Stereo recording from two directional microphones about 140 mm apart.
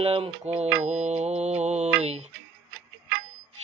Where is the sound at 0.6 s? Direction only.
55° right (ahead or behind).